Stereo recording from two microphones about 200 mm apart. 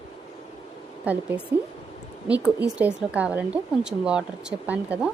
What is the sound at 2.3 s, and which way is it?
Speech, 5° right (ahead or behind).